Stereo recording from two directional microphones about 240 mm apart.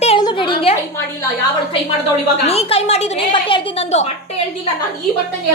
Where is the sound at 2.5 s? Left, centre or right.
Left.